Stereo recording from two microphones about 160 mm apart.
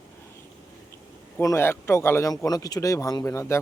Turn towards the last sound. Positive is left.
turn(degrees=15)  # may be behind; listen again after turning